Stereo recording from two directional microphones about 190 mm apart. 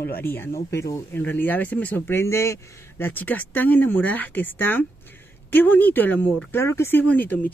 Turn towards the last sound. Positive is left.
turn(degrees=10)  # may be behind; listen again after turning